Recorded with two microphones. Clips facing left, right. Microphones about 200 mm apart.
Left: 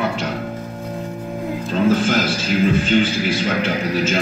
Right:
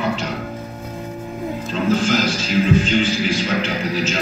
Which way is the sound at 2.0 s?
50° left (ahead or behind).